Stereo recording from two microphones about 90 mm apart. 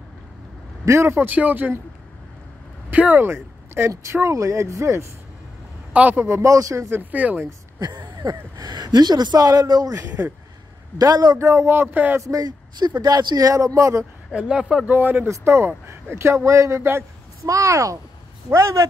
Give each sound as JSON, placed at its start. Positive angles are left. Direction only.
{"t": 0.8, "sound": "a man's voice", "side_deg": -30}
{"t": 2.9, "sound": "speech", "side_deg": -15}
{"t": 5.9, "sound": "a man's voice", "side_deg": -20}
{"t": 6.9, "sound": "a man's voice", "side_deg": -20}
{"t": 7.8, "sound": "speech", "side_deg": -50}
{"t": 10.0, "sound": "a man's voice", "side_deg": -20}
{"t": 11.0, "sound": "speech", "side_deg": -45}
{"t": 11.3, "sound": "a man's voice", "side_deg": -30}
{"t": 12.2, "sound": "speech", "side_deg": -40}
{"t": 14.3, "sound": "speech", "side_deg": -10}
{"t": 14.9, "sound": "a man's voice", "side_deg": -20}
{"t": 15.2, "sound": "speech", "side_deg": -30}